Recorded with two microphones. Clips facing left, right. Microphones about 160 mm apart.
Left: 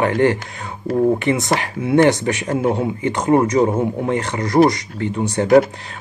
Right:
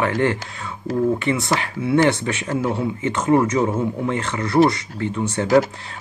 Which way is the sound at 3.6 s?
30° left (ahead or behind).